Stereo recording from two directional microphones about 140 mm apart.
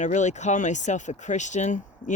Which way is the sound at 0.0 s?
60° left (ahead or behind).